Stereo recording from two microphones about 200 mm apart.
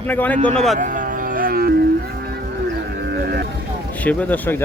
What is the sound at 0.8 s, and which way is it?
Music, 40° right (ahead or behind).